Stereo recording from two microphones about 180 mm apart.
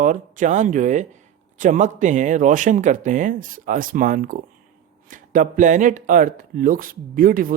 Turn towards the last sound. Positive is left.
turn(degrees=-50)  # may be behind; listen again after turning